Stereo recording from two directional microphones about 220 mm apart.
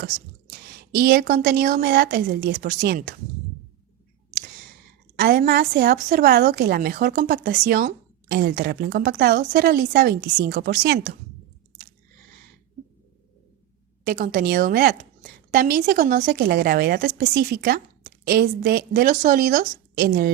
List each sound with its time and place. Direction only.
0.9 s a woman's voice: 45° right (ahead or behind)
5.1 s a woman's voice: 45° right (ahead or behind)
14.0 s a woman's voice: 40° right (ahead or behind)